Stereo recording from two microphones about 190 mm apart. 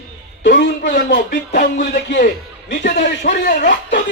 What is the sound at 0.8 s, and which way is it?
A man's voice, 45° left (ahead or behind).